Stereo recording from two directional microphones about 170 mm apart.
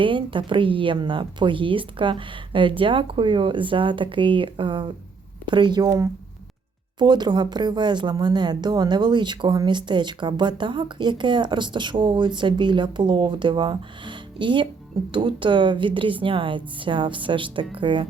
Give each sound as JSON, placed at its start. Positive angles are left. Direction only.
{"t": 0.0, "sound": "a woman's voice", "side_deg": -30}